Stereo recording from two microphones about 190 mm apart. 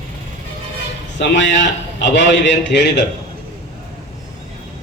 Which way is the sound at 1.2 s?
70° left (ahead or behind).